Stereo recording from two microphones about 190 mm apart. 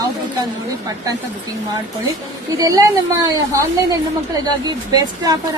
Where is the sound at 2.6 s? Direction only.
20° right (ahead or behind).